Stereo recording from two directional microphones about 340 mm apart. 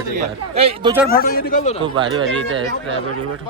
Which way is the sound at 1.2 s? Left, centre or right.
Left.